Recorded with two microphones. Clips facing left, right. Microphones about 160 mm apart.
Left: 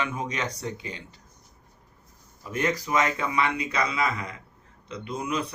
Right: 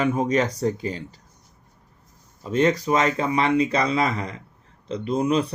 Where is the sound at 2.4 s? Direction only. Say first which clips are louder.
Right 7 dB; 30° right (ahead or behind).